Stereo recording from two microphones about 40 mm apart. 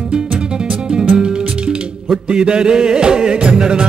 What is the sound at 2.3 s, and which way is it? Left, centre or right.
Music, right.